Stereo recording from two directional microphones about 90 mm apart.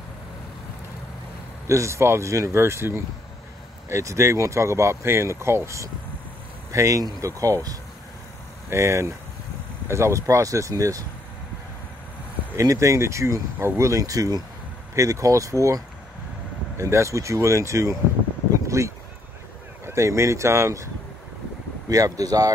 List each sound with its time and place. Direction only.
1.7 s speech: 35° right (ahead or behind)
12.5 s speech: 35° right (ahead or behind)
21.8 s speech: 40° right (ahead or behind)